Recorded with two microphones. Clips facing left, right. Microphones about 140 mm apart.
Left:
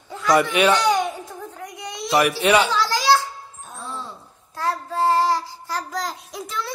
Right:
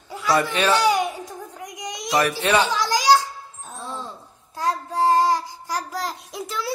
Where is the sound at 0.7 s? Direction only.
10° right (ahead or behind).